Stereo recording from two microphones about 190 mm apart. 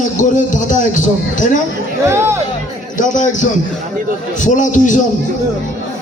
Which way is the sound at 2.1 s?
15° right (ahead or behind).